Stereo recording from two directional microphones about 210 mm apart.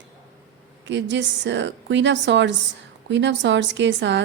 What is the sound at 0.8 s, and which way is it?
Speech, 60° right (ahead or behind).